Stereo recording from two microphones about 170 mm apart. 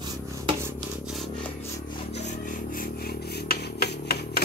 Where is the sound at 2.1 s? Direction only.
45° left (ahead or behind).